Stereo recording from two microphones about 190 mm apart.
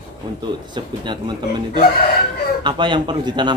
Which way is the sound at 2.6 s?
25° right (ahead or behind).